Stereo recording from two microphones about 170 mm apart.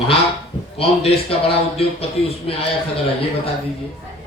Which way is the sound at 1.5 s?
35° left (ahead or behind).